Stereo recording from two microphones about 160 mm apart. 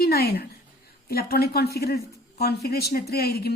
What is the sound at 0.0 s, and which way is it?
Speech, 75° left (ahead or behind).